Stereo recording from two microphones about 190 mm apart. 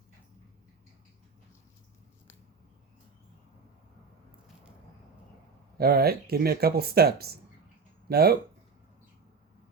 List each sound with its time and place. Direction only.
5.7 s speech: 55° right (ahead or behind)